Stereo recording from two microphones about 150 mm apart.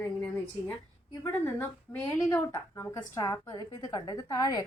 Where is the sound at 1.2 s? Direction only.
15° left (ahead or behind).